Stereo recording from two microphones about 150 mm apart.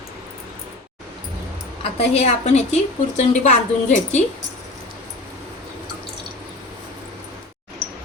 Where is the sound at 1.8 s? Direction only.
45° left (ahead or behind).